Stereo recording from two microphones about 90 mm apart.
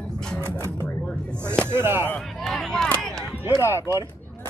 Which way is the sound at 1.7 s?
25° right (ahead or behind).